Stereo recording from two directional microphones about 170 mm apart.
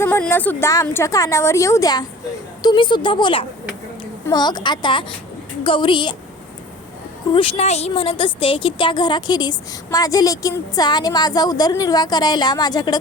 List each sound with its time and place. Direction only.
0.0 s a woman's voice: 10° left (ahead or behind); by 6.1 s 30° left (ahead or behind)
7.3 s a woman's voice: 35° left (ahead or behind)